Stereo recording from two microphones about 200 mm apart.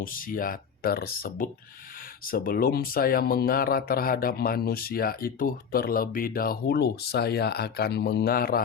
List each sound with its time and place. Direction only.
0.0 s speech: 45° left (ahead or behind)